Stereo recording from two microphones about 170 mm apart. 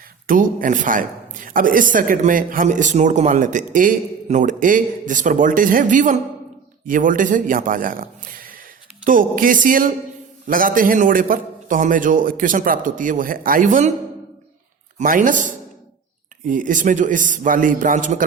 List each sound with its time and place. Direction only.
0.3 s a woman's voice: 55° right (ahead or behind)
14.9 s a woman's voice: 50° right (ahead or behind)